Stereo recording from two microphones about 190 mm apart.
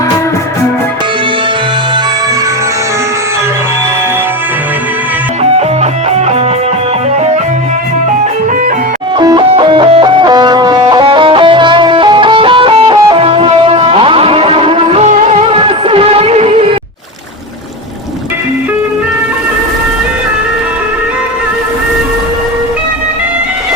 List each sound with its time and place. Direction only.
5.4 s music: 35° right (ahead or behind)
9.1 s music: 25° right (ahead or behind)